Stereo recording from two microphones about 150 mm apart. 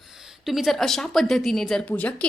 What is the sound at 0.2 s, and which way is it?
A woman's voice, centre (ahead or behind).